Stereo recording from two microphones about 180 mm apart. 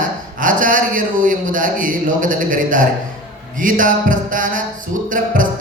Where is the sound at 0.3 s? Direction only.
50° right (ahead or behind).